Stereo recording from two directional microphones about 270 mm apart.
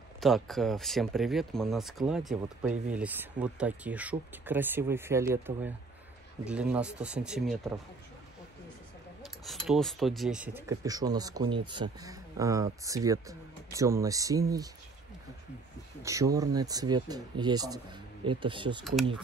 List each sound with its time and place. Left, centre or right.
0.2 s speech: centre
9.2 s speech: centre
16.0 s speech: centre